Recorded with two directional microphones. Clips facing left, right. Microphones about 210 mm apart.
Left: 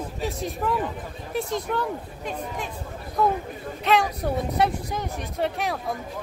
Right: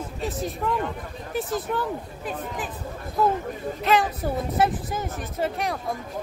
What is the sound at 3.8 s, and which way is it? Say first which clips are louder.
Speech: even; centre (ahead or behind).